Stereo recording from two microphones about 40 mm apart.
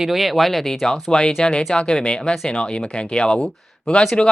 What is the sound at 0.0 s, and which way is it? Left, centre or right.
Speech, centre.